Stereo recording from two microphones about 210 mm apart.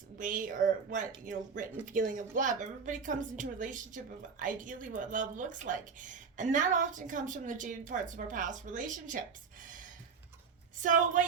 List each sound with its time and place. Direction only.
0.2 s a woman's voice: 40° right (ahead or behind)
10.8 s a woman's voice: 40° right (ahead or behind)